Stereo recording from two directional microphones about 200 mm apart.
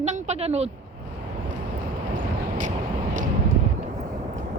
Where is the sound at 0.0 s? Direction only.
35° right (ahead or behind).